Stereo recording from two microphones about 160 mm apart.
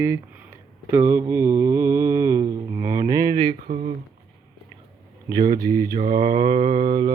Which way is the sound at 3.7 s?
65° right (ahead or behind).